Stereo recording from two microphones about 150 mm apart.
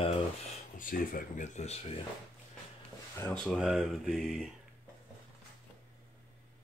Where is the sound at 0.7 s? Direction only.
65° left (ahead or behind); by 2.0 s 50° left (ahead or behind).